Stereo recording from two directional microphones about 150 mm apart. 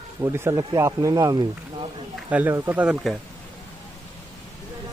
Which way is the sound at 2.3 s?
10° right (ahead or behind).